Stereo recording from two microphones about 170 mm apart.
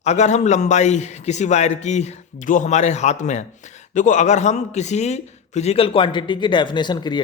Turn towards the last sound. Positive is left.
turn(degrees=25)  # may be behind; listen again after turning